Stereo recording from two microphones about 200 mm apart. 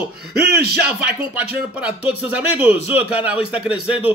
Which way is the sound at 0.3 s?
50° right (ahead or behind).